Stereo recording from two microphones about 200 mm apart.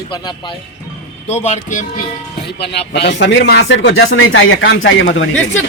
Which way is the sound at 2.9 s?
60° left (ahead or behind).